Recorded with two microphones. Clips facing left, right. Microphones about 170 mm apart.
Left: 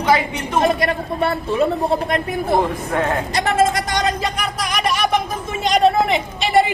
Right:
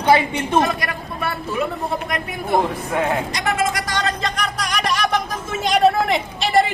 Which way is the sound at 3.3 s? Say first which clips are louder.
Left 4 dB; 35° left (ahead or behind).